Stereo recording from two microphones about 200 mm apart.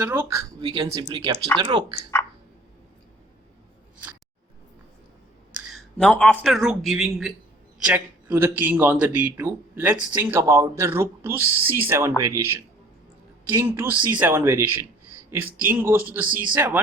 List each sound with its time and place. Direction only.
0.0 s speech: 10° right (ahead or behind)
5.5 s speech: centre (ahead or behind)